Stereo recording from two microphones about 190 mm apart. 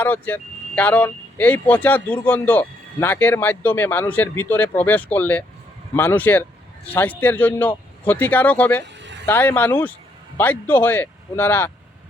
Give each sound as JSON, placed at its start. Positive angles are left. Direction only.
{"t": 0.0, "sound": "a man's voice", "side_deg": 10}
{"t": 8.8, "sound": "a sound", "side_deg": -65}
{"t": 9.2, "sound": "a man's voice", "side_deg": 10}